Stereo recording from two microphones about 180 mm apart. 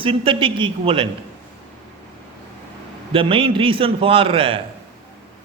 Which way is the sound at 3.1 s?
30° right (ahead or behind).